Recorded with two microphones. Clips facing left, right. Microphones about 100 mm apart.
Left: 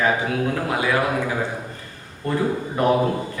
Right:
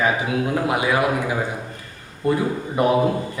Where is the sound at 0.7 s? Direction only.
15° right (ahead or behind).